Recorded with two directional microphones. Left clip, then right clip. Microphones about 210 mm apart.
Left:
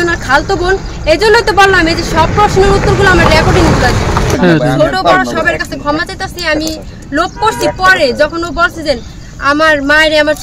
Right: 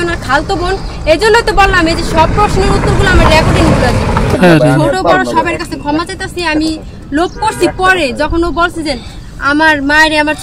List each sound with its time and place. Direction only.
0.0 s speech: 10° left (ahead or behind)
4.4 s speech: 35° right (ahead or behind)
5.1 s speech: 10° left (ahead or behind)